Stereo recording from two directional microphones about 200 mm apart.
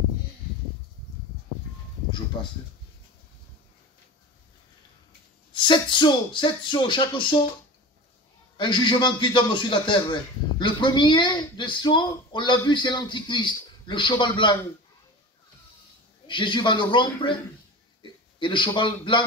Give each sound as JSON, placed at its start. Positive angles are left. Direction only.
{"t": 5.5, "sound": "speech", "side_deg": 25}
{"t": 8.5, "sound": "speech", "side_deg": 25}
{"t": 16.3, "sound": "speech", "side_deg": 25}
{"t": 18.4, "sound": "speech", "side_deg": 25}